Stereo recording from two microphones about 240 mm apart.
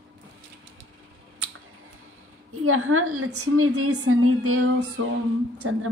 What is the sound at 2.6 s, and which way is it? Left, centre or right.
A woman's voice, right.